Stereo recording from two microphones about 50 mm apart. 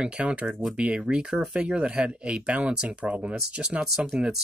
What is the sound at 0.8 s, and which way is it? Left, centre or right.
Speech, right.